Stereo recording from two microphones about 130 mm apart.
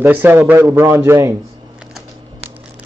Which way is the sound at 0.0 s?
15° right (ahead or behind).